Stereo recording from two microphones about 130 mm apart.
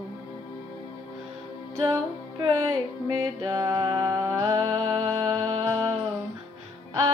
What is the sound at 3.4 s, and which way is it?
Music, 30° right (ahead or behind).